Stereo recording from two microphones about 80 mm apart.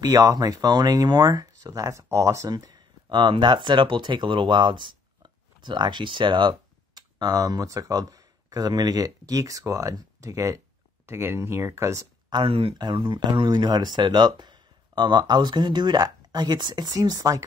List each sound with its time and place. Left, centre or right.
0.0 s speech: right
2.5 s speech: right
12.3 s speech: right